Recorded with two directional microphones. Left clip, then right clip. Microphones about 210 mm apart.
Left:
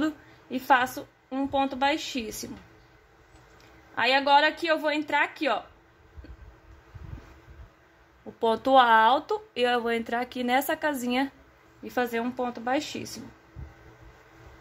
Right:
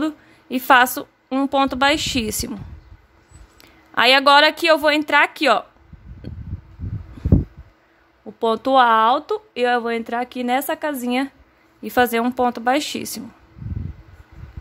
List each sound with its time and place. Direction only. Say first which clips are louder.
0.0 s a woman's voice: right 5 dB; 35° right (ahead or behind)
3.9 s speech: right 9 dB; 35° right (ahead or behind)
8.4 s speech: right 5 dB; 20° right (ahead or behind)
11.8 s speech: right 11 dB; 35° right (ahead or behind)